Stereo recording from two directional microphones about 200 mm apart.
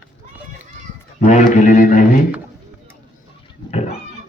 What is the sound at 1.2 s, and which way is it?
Music, 40° left (ahead or behind).